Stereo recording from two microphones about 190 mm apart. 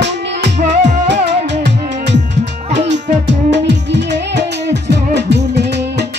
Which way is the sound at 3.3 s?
65° right (ahead or behind).